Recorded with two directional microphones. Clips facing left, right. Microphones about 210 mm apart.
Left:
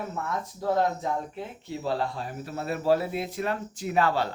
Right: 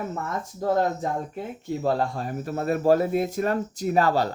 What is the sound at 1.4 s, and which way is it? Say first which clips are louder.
Speech: right 5 dB; 50° right (ahead or behind).